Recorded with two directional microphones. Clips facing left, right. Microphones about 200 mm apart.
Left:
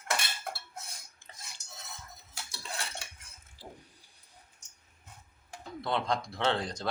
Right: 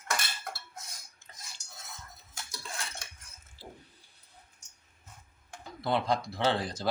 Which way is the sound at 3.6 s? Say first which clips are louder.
Even; 15° left (ahead or behind).